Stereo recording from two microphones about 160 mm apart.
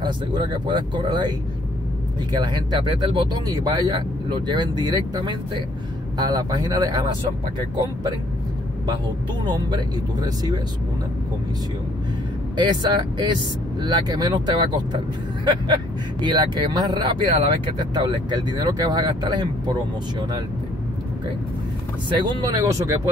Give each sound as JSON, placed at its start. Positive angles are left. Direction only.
{"t": 0.0, "sound": "speech", "side_deg": -30}
{"t": 2.3, "sound": "speech", "side_deg": -25}
{"t": 9.4, "sound": "speech", "side_deg": -30}
{"t": 12.5, "sound": "speech", "side_deg": -25}
{"t": 22.1, "sound": "speech", "side_deg": -25}